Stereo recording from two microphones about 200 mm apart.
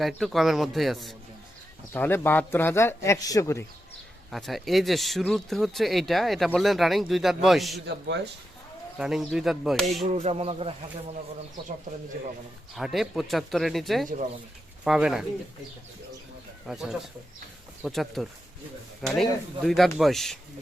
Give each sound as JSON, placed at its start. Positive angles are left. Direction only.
{"t": 0.0, "sound": "speech", "side_deg": 0}
{"t": 1.9, "sound": "a man's voice", "side_deg": 10}
{"t": 4.3, "sound": "speech", "side_deg": 0}
{"t": 7.9, "sound": "speech", "side_deg": -60}
{"t": 9.0, "sound": "speech", "side_deg": 0}
{"t": 10.0, "sound": "speech", "side_deg": -30}
{"t": 12.7, "sound": "speech", "side_deg": 0}
{"t": 16.6, "sound": "speech", "side_deg": 0}